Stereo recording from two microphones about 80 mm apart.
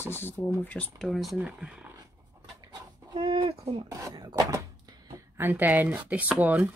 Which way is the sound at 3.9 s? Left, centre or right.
Right.